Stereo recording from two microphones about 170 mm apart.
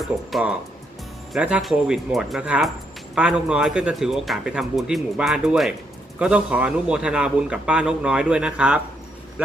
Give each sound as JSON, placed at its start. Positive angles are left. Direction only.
{"t": 0.0, "sound": "a man's voice", "side_deg": 0}